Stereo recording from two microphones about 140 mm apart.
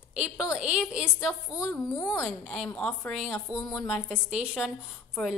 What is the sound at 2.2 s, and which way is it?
A woman's voice, centre (ahead or behind).